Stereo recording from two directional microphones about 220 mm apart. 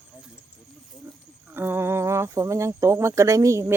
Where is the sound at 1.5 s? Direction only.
10° right (ahead or behind).